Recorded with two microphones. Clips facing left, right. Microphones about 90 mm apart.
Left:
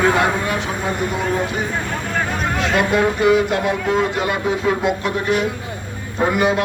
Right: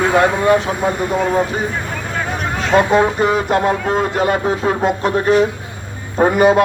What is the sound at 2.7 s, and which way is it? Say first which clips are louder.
A man's voice: right 6 dB; 35° right (ahead or behind).